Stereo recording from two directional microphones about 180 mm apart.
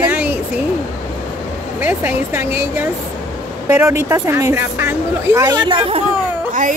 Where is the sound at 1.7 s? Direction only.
10° right (ahead or behind); by 6.0 s 30° right (ahead or behind).